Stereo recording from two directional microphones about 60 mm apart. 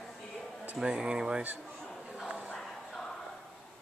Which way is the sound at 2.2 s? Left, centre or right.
Centre.